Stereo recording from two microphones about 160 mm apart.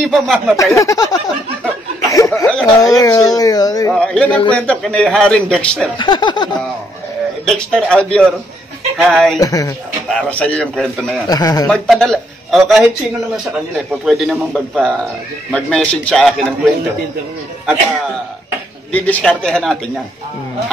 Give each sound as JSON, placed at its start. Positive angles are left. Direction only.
{"t": 0.0, "sound": "speech", "side_deg": 0}
{"t": 0.7, "sound": "speech", "side_deg": 20}
{"t": 2.0, "sound": "chuckle", "side_deg": 20}
{"t": 2.4, "sound": "snicker", "side_deg": 5}
{"t": 2.8, "sound": "speech", "side_deg": 20}
{"t": 3.9, "sound": "a man's voice", "side_deg": 5}
{"t": 5.9, "sound": "speech", "side_deg": 30}
{"t": 7.4, "sound": "speech", "side_deg": 5}
{"t": 9.4, "sound": "speech", "side_deg": 20}
{"t": 10.0, "sound": "a man's voice", "side_deg": 5}
{"t": 11.2, "sound": "speech", "side_deg": 25}
{"t": 11.6, "sound": "speech", "side_deg": 5}
{"t": 14.0, "sound": "a man's voice", "side_deg": 0}
{"t": 18.9, "sound": "a man's voice", "side_deg": 10}